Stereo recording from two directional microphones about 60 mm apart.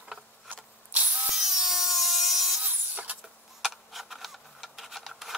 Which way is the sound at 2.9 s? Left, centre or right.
Right.